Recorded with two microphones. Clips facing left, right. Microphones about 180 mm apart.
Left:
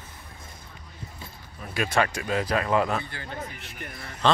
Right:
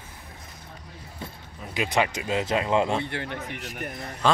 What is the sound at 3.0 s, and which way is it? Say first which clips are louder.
Speech: right 4 dB; 70° right (ahead or behind).